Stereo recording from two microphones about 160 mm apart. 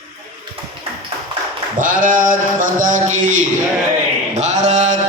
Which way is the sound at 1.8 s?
55° right (ahead or behind).